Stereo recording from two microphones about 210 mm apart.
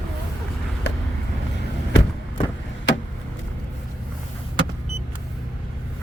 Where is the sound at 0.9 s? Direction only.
55° left (ahead or behind).